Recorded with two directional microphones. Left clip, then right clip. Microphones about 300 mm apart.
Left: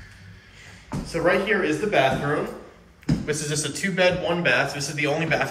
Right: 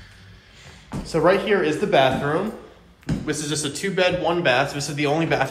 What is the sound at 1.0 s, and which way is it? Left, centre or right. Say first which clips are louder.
Speech: right 3 dB; centre.